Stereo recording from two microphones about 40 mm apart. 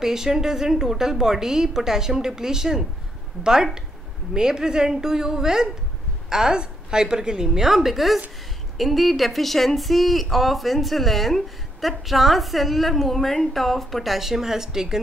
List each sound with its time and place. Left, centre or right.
0.0 s a woman's voice: centre